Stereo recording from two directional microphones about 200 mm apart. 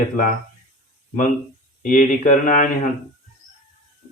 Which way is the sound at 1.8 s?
40° left (ahead or behind).